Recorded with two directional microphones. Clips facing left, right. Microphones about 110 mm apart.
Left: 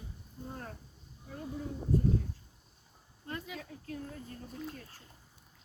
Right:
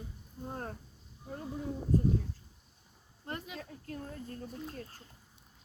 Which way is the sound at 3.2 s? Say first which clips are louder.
Even; 40° right (ahead or behind).